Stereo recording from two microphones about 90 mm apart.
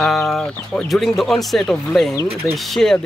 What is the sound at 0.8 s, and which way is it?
Speech, centre (ahead or behind).